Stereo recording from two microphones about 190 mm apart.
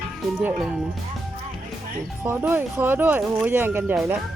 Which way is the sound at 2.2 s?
10° right (ahead or behind).